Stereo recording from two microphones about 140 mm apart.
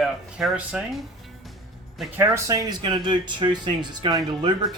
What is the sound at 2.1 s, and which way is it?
Speech, 20° right (ahead or behind).